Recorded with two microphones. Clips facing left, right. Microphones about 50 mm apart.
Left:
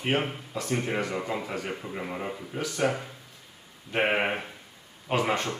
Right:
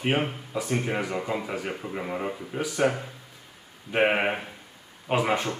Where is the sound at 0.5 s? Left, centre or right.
Centre.